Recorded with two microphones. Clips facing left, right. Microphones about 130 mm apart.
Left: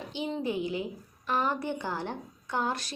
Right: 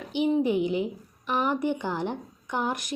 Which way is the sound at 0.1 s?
15° right (ahead or behind).